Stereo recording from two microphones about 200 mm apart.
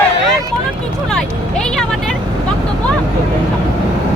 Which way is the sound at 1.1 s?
5° left (ahead or behind).